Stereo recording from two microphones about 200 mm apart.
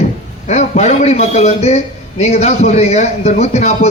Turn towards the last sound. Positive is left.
turn(degrees=35)  # may be behind; listen again after turning